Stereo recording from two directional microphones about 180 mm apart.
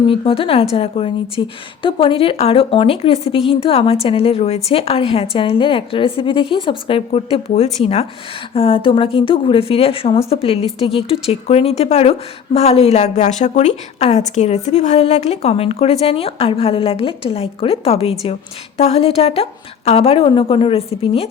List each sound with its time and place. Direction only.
0.1 s a woman's voice: 30° left (ahead or behind)